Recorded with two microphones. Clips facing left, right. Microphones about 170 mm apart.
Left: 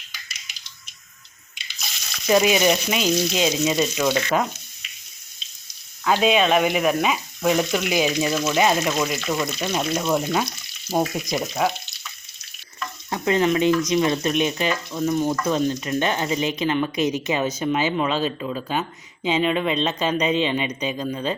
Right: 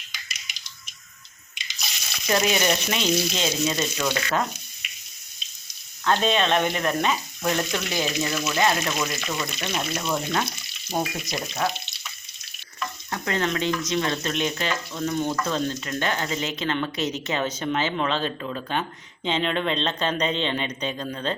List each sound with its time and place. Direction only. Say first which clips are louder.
2.2 s frying: left 5 dB; 10° left (ahead or behind)
6.1 s frying: left 3 dB; 10° left (ahead or behind)
13.1 s frying: left 7 dB; 15° left (ahead or behind)